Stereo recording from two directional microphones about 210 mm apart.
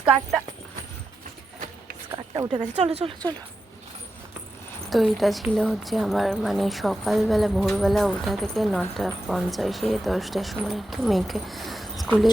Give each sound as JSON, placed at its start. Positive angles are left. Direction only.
{"t": 2.1, "sound": "speech", "side_deg": -20}
{"t": 4.9, "sound": "speech", "side_deg": 0}